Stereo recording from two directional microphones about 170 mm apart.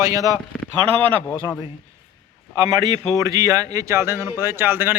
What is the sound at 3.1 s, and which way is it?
Speech, 20° right (ahead or behind).